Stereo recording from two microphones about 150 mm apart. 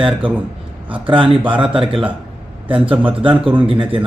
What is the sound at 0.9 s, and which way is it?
A man's voice, 35° right (ahead or behind).